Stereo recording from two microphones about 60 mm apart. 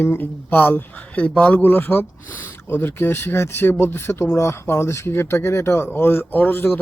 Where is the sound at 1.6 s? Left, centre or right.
Left.